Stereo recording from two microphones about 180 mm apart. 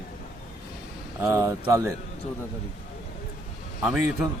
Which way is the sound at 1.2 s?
15° right (ahead or behind).